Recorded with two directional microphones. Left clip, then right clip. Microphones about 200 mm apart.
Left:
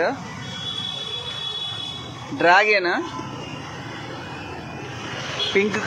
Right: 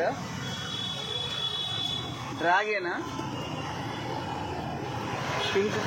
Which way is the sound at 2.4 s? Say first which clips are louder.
Left 10 dB; 65° left (ahead or behind).